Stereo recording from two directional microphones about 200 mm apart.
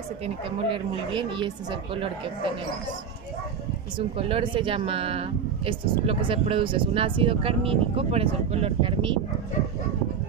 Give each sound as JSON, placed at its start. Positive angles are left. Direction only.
{"t": 0.7, "sound": "speech", "side_deg": -25}
{"t": 4.2, "sound": "speech", "side_deg": -25}